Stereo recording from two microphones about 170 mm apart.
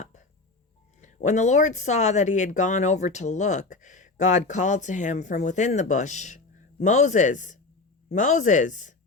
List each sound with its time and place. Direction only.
0.0 s chopping: 45° left (ahead or behind)
1.0 s speech: 45° left (ahead or behind)